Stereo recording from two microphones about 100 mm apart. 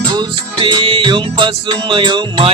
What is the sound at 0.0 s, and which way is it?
Music, 50° right (ahead or behind).